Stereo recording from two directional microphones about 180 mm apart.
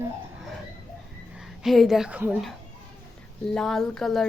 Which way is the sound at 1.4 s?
Centre (ahead or behind).